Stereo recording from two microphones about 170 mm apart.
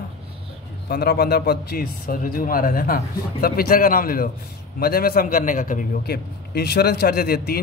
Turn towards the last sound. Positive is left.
turn(degrees=65)  # may be behind; listen again after turning